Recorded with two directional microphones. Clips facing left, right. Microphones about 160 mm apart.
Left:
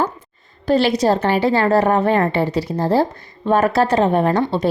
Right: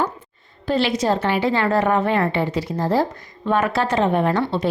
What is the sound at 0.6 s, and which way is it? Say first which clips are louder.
A woman's voice: left 4 dB; 40° left (ahead or behind).